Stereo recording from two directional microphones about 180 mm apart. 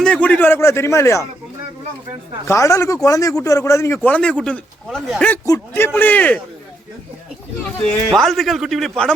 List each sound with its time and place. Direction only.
0.0 s a man's voice: 5° left (ahead or behind)
2.5 s a man's voice: 15° left (ahead or behind)
8.1 s a man's voice: centre (ahead or behind)